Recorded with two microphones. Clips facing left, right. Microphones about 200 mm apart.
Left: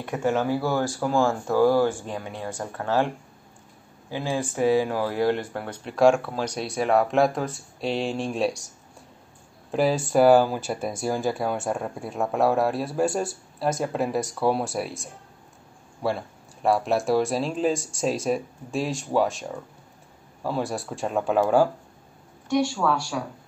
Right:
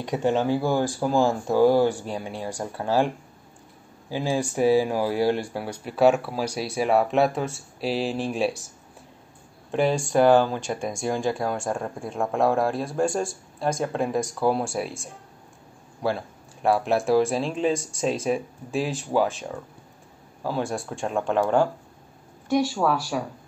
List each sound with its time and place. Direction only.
0.0 s speech: 20° right (ahead or behind)
4.1 s speech: 15° right (ahead or behind); by 21.6 s 5° left (ahead or behind)
22.5 s speech: 35° right (ahead or behind)